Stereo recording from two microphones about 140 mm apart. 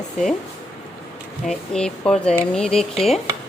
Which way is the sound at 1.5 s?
5° left (ahead or behind).